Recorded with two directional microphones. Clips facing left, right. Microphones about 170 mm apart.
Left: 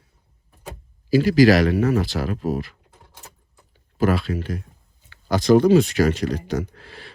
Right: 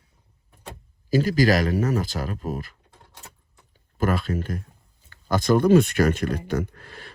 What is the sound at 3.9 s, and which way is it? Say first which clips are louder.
Speech: left 3 dB; 50° right (ahead or behind).